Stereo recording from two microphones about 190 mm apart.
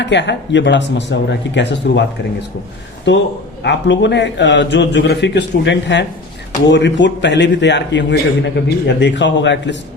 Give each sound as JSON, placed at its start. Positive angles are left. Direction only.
{"t": 0.0, "sound": "a man's voice", "side_deg": 65}
{"t": 3.6, "sound": "a man's voice", "side_deg": 70}